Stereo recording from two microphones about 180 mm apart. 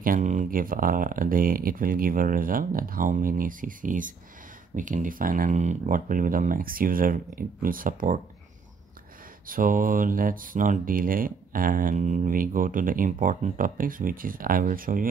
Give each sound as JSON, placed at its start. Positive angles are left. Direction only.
{"t": 0.0, "sound": "speech", "side_deg": -45}
{"t": 9.5, "sound": "speech", "side_deg": -50}